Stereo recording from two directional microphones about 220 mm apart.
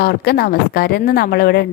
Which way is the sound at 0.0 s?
45° left (ahead or behind).